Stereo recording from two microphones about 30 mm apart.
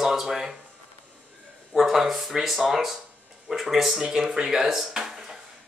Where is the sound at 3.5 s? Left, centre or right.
Centre.